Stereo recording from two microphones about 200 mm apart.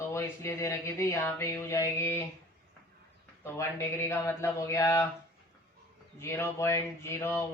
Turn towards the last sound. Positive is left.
turn(degrees=15)  # may be behind; listen again after turning